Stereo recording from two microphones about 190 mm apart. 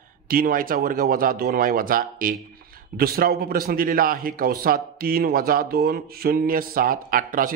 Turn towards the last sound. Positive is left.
turn(degrees=-45)  # may be behind; listen again after turning